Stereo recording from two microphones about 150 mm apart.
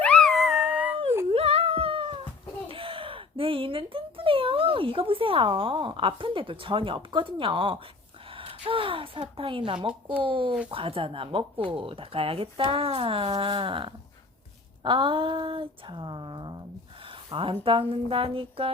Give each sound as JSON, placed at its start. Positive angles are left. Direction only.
{"t": 0.0, "sound": "dog", "side_deg": 5}
{"t": 1.3, "sound": "a sound", "side_deg": -40}
{"t": 2.7, "sound": "speech", "side_deg": -35}